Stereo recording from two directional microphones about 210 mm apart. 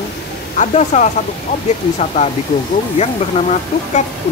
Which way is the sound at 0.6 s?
35° left (ahead or behind).